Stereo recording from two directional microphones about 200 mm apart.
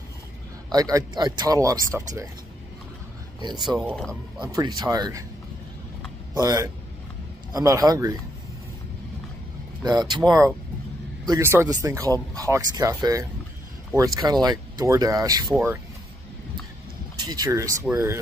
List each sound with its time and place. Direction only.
0.7 s speech: 20° right (ahead or behind)
3.3 s speech: 20° right (ahead or behind)
3.6 s speech: centre (ahead or behind)
4.4 s speech: 20° right (ahead or behind)
6.4 s speech: 15° right (ahead or behind)
9.8 s speech: 20° right (ahead or behind)
11.2 s speech: 15° right (ahead or behind)
17.2 s speech: 20° right (ahead or behind)